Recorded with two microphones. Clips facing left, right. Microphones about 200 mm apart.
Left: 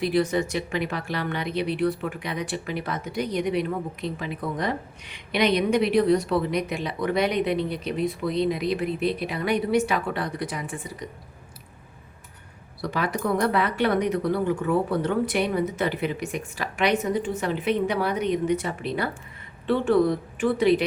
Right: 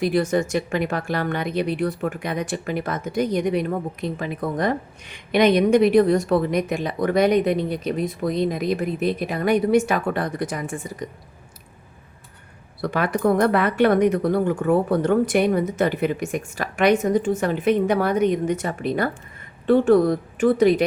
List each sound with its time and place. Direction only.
0.0 s speech: 45° right (ahead or behind)
12.8 s speech: 55° right (ahead or behind)